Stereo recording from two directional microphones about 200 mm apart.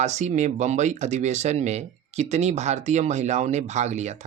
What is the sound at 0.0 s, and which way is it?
Speech, 35° right (ahead or behind).